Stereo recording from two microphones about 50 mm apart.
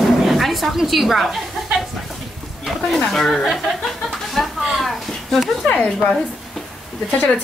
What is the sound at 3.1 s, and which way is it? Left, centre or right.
Speech, centre.